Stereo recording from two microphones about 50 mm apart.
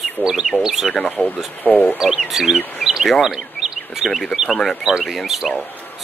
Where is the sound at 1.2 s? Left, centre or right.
Left.